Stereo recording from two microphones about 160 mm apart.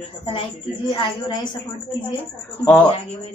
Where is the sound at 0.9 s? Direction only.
30° left (ahead or behind).